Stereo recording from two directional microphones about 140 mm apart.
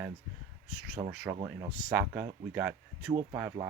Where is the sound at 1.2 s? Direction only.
20° right (ahead or behind).